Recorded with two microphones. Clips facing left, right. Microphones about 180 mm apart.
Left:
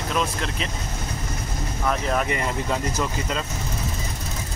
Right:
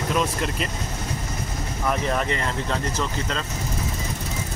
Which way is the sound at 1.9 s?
Centre (ahead or behind).